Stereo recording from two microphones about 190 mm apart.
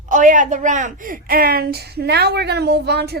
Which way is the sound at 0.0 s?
40° right (ahead or behind).